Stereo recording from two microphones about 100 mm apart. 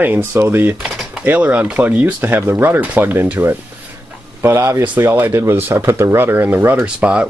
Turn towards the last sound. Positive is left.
turn(degrees=-10)  # may be behind; listen again after turning